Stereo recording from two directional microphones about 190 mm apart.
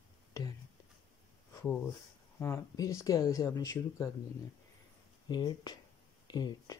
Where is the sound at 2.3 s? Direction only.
15° left (ahead or behind).